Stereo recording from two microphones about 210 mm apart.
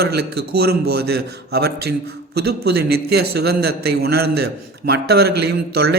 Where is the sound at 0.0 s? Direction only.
50° right (ahead or behind).